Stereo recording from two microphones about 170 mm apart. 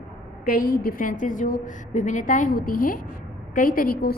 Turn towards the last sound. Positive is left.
turn(degrees=60)  # may be behind; listen again after turning